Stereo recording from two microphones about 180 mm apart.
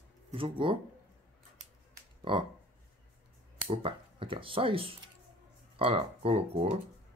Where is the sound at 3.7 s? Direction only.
30° right (ahead or behind).